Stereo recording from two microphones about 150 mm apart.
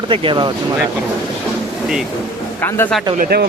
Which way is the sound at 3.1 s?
90° right.